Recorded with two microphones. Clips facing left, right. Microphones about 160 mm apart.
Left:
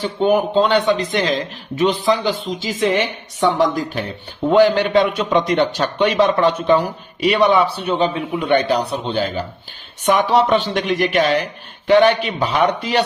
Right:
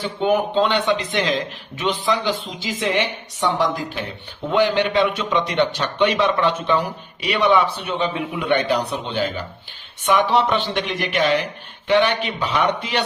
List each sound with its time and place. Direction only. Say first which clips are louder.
0.0 s a man's voice: left 3 dB; 40° left (ahead or behind)